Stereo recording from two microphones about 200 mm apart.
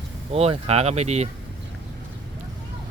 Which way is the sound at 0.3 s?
30° right (ahead or behind).